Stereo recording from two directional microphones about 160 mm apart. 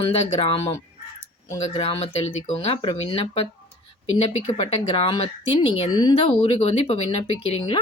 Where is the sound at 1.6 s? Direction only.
35° left (ahead or behind).